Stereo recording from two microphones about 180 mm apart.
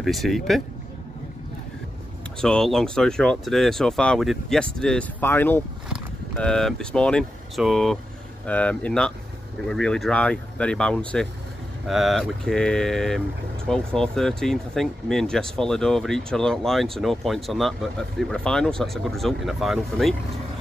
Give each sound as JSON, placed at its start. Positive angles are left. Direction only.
{"t": 0.0, "sound": "speech", "side_deg": 0}
{"t": 2.4, "sound": "speech", "side_deg": 0}